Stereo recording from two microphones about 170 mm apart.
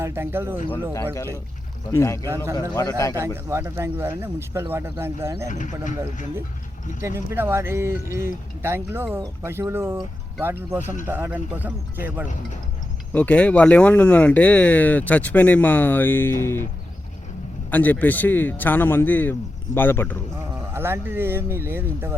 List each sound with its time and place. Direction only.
0.0 s speech: 15° right (ahead or behind)
1.9 s a man's voice: 15° left (ahead or behind)
3.5 s speech: 15° right (ahead or behind)
5.5 s speech: 45° left (ahead or behind)
7.0 s speech: 15° right (ahead or behind)
13.1 s speech: 5° left (ahead or behind)
17.7 s speech: 10° left (ahead or behind)
20.7 s speech: 15° right (ahead or behind)